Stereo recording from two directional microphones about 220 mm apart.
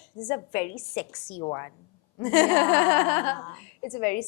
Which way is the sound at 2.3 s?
5° left (ahead or behind).